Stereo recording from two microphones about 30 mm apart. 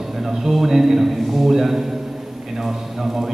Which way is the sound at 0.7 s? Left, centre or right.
Centre.